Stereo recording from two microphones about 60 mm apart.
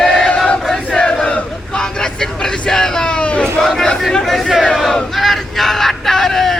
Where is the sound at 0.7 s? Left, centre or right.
Centre.